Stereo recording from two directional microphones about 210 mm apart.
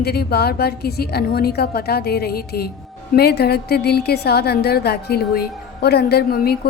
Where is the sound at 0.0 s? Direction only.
50° left (ahead or behind).